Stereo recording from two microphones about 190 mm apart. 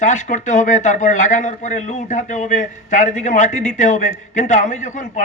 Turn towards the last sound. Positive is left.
turn(degrees=40)  # may be behind; listen again after turning